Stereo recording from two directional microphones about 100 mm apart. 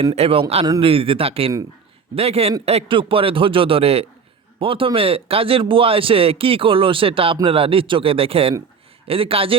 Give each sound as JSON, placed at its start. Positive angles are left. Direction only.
{"t": 0.2, "sound": "speech", "side_deg": -70}
{"t": 2.1, "sound": "a man's voice", "side_deg": -85}